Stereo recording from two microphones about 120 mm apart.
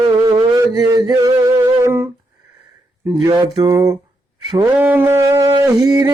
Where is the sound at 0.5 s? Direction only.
30° right (ahead or behind).